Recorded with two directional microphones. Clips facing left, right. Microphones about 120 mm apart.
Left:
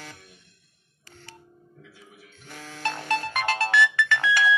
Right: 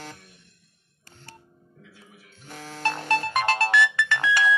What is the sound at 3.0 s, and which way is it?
Music, 15° left (ahead or behind).